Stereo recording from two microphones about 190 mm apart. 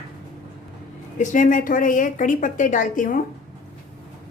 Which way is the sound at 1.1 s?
40° left (ahead or behind).